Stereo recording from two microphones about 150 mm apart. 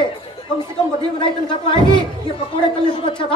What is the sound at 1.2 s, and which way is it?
Speech, 35° left (ahead or behind).